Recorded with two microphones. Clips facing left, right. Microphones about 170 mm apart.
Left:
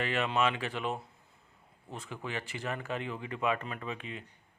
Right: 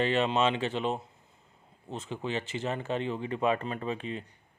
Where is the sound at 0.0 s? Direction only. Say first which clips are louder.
Right 4 dB; 25° right (ahead or behind).